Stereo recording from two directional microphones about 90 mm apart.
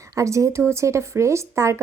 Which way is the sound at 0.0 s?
35° right (ahead or behind).